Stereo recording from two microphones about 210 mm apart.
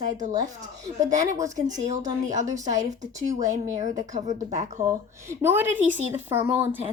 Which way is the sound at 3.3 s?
15° right (ahead or behind).